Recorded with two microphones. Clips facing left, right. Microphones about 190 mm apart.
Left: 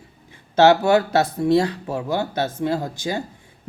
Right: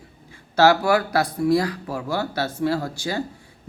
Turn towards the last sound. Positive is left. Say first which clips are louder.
# left 1 dB
turn(degrees=20)  # may be behind; listen again after turning